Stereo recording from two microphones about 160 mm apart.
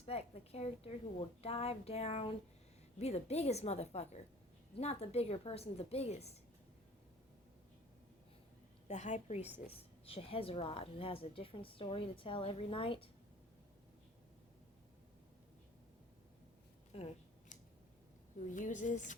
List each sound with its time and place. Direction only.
0.0 s a woman's voice: 40° left (ahead or behind)
8.9 s a woman's voice: 45° left (ahead or behind)
16.9 s a sound: 40° left (ahead or behind)
18.4 s a woman's voice: 50° left (ahead or behind)